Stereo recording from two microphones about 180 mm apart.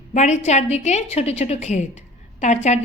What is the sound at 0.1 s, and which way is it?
A woman's voice, 40° left (ahead or behind).